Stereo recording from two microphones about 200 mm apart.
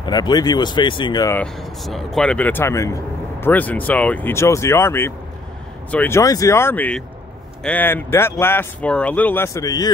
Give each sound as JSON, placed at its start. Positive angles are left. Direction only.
{"t": 0.0, "sound": "speech", "side_deg": 20}
{"t": 1.4, "sound": "speech", "side_deg": 0}